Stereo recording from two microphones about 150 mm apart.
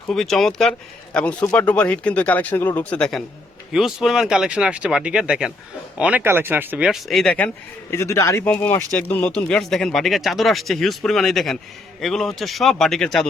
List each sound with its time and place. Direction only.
0.1 s a man's voice: centre (ahead or behind); by 8.4 s 20° left (ahead or behind)
8.4 s speech: 10° left (ahead or behind)